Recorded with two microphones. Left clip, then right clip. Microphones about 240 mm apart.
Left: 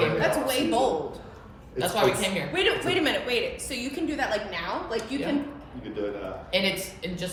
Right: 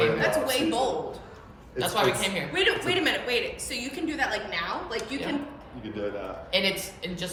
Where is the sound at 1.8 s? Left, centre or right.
Centre.